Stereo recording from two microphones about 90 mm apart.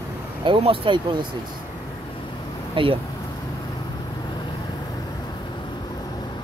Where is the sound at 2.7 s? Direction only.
75° right (ahead or behind).